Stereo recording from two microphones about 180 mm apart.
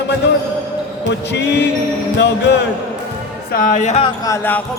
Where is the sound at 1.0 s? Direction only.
70° left (ahead or behind).